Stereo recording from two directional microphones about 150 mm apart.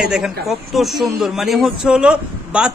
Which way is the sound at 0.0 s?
5° right (ahead or behind).